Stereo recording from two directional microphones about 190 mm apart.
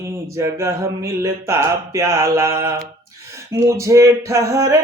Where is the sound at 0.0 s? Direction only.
15° right (ahead or behind).